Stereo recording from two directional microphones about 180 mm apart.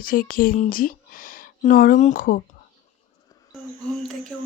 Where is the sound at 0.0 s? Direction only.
50° left (ahead or behind).